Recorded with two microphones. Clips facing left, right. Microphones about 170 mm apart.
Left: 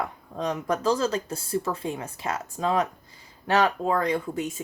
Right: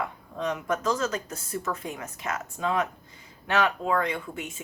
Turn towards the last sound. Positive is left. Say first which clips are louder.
# left 6 dB
turn(degrees=40)  # may be behind; listen again after turning